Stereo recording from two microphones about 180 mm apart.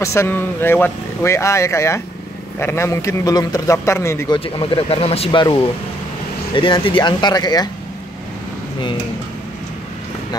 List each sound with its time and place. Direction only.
0.0 s speech: 15° left (ahead or behind)
4.6 s speech: 30° left (ahead or behind)